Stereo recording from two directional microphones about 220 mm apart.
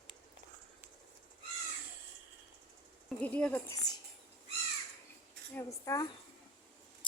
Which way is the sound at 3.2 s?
5° left (ahead or behind).